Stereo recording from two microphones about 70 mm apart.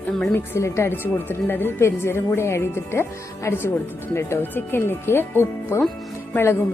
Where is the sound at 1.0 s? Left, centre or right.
Left.